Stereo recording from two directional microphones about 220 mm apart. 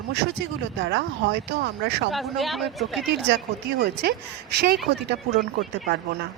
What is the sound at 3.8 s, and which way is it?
Speech, 50° right (ahead or behind).